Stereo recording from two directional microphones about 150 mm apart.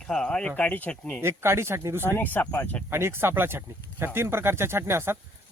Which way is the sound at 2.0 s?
15° left (ahead or behind).